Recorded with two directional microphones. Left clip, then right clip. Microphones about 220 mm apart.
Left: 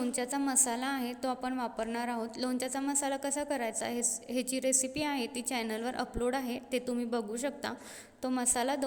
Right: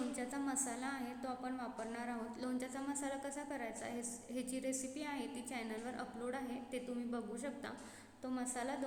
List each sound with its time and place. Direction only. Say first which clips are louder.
0.2 s a woman's voice: left 10 dB; 40° left (ahead or behind)